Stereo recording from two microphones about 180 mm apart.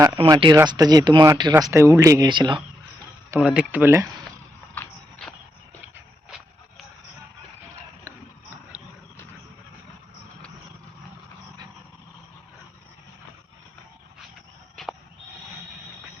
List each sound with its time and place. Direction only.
0.3 s speech: 25° right (ahead or behind)
3.3 s speech: 5° right (ahead or behind)
4.7 s a sound: 10° left (ahead or behind)